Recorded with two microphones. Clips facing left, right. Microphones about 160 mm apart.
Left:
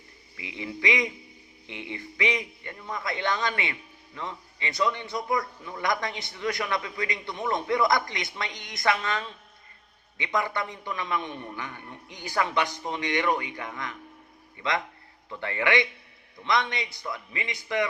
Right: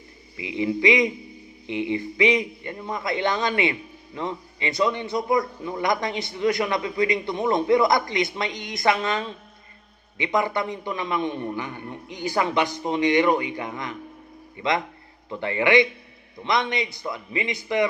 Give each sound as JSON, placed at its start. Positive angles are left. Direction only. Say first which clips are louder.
{"t": 0.3, "sound": "a man's voice", "louder": "right 11 dB", "side_deg": -15}